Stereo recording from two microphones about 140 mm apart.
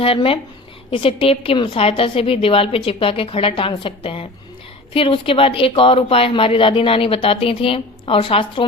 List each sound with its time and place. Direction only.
0.0 s speech: 40° left (ahead or behind)